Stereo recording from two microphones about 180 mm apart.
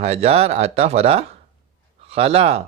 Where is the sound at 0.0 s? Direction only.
35° right (ahead or behind).